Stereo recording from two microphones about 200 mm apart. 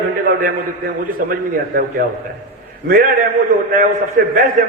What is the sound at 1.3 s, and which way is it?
A man's voice, 45° right (ahead or behind).